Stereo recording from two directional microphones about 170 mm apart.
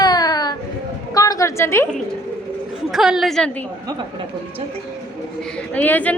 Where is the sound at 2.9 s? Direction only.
Centre (ahead or behind).